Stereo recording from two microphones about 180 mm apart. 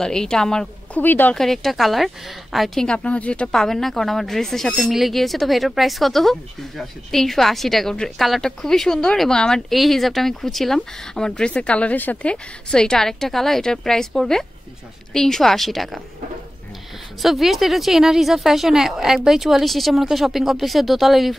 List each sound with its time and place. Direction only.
0.0 s a woman's voice: 5° left (ahead or behind)
17.2 s a woman's voice: centre (ahead or behind)